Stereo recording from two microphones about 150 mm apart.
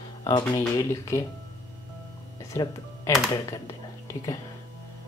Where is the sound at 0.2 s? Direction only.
30° left (ahead or behind).